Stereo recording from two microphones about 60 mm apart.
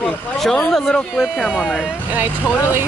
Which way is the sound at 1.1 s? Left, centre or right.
Centre.